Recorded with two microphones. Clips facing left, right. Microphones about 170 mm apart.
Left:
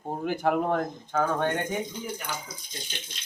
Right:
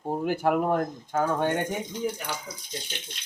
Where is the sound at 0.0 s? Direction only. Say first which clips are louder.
Right 2 dB; 5° right (ahead or behind).